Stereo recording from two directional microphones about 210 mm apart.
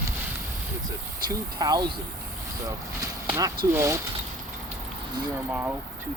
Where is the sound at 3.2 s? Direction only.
15° right (ahead or behind).